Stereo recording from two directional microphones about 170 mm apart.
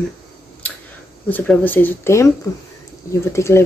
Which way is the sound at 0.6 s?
5° left (ahead or behind).